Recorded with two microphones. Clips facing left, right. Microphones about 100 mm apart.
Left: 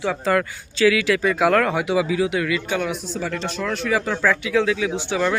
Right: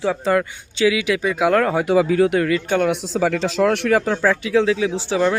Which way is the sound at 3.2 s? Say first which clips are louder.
Right 10 dB; 90° right.